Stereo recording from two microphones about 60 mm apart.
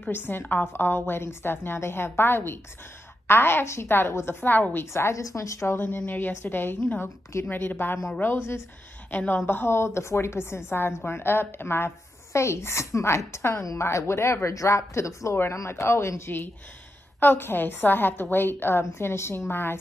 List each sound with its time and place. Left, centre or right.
0.1 s a woman's voice: left
4.4 s a woman's voice: left
4.9 s a woman's voice: left
5.8 s a woman's voice: left
9.5 s a woman's voice: left